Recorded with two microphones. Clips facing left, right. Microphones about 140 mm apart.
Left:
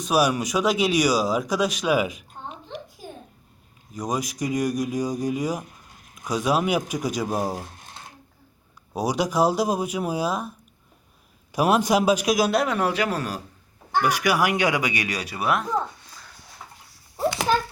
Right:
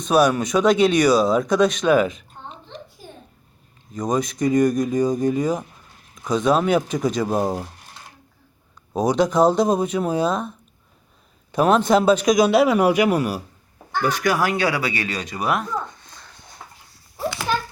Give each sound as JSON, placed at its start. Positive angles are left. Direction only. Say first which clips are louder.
{"t": 0.0, "sound": "speech", "louder": "right 4 dB", "side_deg": 5}
{"t": 3.9, "sound": "speech", "louder": "right 5 dB", "side_deg": 10}
{"t": 7.3, "sound": "speech", "louder": "right 4 dB", "side_deg": -20}
{"t": 9.0, "sound": "speech", "louder": "right 5 dB", "side_deg": 10}
{"t": 11.5, "sound": "a man's voice", "louder": "right 3 dB", "side_deg": 10}
{"t": 14.0, "sound": "speech", "louder": "right 2 dB", "side_deg": 10}
{"t": 15.9, "sound": "a sound", "louder": "right 1 dB", "side_deg": 10}